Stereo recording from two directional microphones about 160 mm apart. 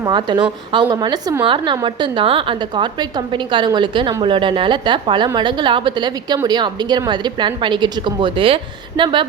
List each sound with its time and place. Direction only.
0.0 s a woman's voice: 25° right (ahead or behind)